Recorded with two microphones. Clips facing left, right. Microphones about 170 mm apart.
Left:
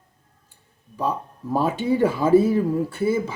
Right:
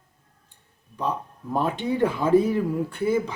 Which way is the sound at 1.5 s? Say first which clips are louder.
Left 3 dB; 5° left (ahead or behind).